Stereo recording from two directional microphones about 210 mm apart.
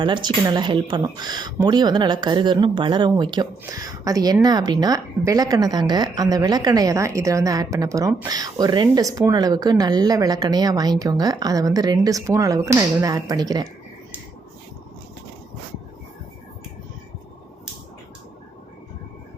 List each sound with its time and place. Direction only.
0.0 s a woman's voice: 20° right (ahead or behind)